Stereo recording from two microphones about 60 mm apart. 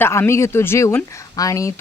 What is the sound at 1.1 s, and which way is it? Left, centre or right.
Speech, left.